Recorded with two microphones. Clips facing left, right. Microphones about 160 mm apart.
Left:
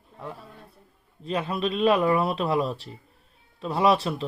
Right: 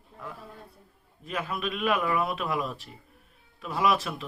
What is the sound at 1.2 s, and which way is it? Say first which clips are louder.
Speech: left 5 dB; 30° left (ahead or behind).